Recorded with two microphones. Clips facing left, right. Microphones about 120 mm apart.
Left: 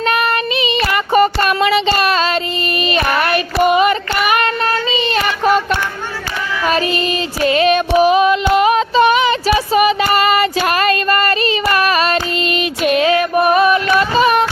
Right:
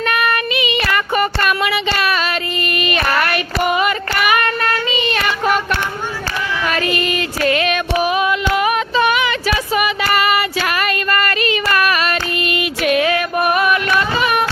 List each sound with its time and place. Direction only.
0.0 s child singing: 30° left (ahead or behind)
2.8 s child singing: 30° left (ahead or behind)
6.7 s female singing: 25° left (ahead or behind)
10.7 s a sound: 35° left (ahead or behind)
11.1 s child singing: 30° left (ahead or behind)
12.5 s female singing: 30° left (ahead or behind)
13.0 s music: 25° left (ahead or behind)